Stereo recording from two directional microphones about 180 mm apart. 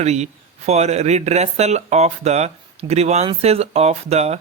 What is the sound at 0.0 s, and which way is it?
Speech, 40° right (ahead or behind).